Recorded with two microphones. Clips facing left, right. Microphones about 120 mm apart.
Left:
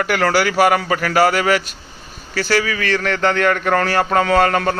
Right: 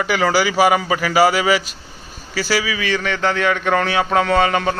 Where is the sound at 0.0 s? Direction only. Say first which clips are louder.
Even; centre (ahead or behind).